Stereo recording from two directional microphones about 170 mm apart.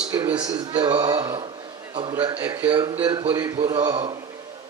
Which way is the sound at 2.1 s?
15° right (ahead or behind).